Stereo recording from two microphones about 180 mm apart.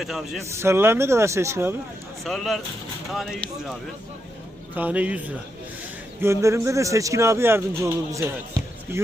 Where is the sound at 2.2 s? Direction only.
Centre (ahead or behind).